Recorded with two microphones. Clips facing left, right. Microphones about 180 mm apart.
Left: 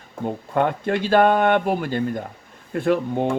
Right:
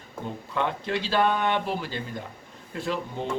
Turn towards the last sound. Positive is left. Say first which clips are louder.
# left 9 dB
turn(degrees=55)  # may be behind; listen again after turning